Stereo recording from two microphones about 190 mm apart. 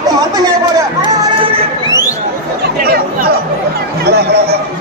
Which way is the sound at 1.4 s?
30° right (ahead or behind).